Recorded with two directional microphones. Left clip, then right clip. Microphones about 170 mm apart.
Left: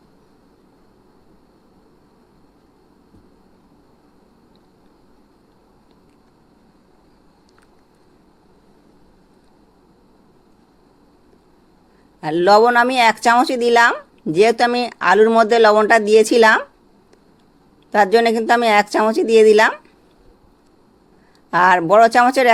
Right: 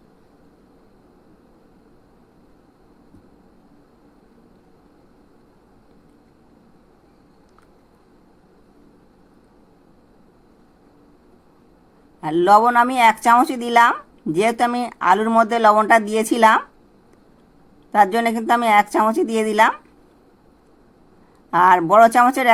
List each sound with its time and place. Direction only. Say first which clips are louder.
12.2 s speech: left 1 dB; 30° left (ahead or behind)
17.9 s speech: left 3 dB; 25° left (ahead or behind)
21.5 s speech: left 1 dB; 30° left (ahead or behind)